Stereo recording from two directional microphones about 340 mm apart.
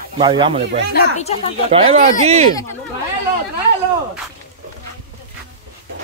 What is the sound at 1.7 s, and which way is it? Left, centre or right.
Speech, centre.